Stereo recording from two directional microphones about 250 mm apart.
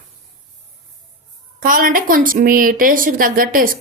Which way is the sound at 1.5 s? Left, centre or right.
Right.